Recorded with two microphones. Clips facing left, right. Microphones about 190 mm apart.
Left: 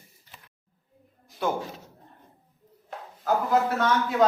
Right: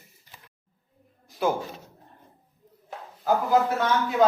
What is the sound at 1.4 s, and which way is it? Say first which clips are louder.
Speech: right 3 dB; 5° right (ahead or behind).